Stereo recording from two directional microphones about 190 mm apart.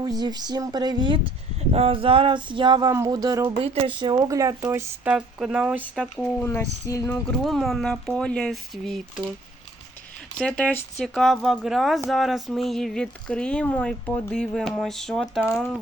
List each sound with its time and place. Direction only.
0.0 s a sound: 20° right (ahead or behind)
3.5 s speech: 30° right (ahead or behind); by 7.2 s 15° left (ahead or behind)
7.3 s speech: centre (ahead or behind)
10.3 s speech: 5° left (ahead or behind)